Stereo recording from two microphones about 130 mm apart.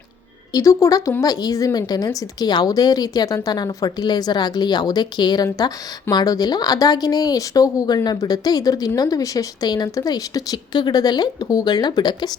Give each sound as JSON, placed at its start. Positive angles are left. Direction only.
{"t": 0.5, "sound": "a woman's voice", "side_deg": 25}